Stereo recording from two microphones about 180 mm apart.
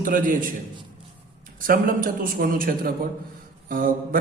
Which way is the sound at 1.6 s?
50° right (ahead or behind).